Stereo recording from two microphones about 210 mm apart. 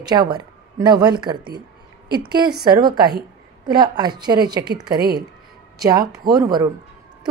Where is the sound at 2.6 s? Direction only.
20° right (ahead or behind).